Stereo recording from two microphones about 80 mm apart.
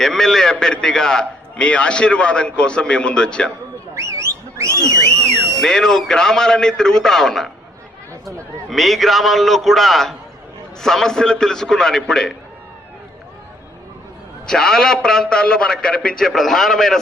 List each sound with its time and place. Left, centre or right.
0.0 s a man's voice: centre
3.9 s a sound: right
5.5 s a man's voice: centre
8.7 s a man's voice: centre
14.4 s a man's voice: centre